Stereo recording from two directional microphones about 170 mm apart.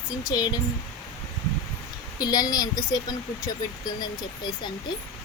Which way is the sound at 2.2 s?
25° left (ahead or behind).